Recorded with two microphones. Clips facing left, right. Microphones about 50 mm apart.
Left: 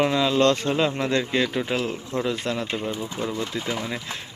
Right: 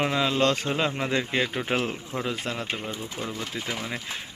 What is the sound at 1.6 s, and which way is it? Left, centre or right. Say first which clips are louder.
Speech: left 1 dB; right.